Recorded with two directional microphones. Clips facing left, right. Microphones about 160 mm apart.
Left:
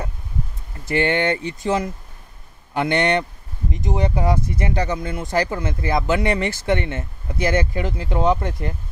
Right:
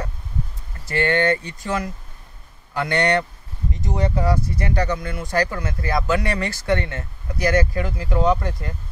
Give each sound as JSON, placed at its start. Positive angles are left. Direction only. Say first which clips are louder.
{"t": 0.8, "sound": "speech", "louder": "even", "side_deg": 20}